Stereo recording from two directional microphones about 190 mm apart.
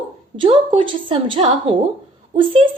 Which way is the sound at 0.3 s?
25° right (ahead or behind).